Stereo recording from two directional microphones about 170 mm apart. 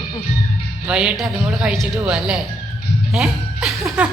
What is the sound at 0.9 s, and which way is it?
A woman's voice, 5° right (ahead or behind).